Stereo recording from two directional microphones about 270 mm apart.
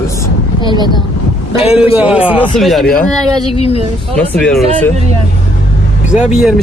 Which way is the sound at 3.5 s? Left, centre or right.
Left.